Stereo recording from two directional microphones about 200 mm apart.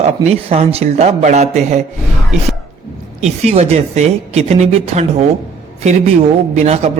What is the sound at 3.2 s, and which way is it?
Speech, 30° right (ahead or behind).